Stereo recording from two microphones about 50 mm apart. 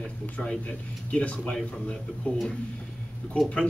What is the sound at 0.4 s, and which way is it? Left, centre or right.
Speech, left.